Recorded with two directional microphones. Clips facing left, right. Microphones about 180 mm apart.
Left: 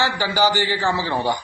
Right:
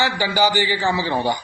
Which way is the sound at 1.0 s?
10° right (ahead or behind).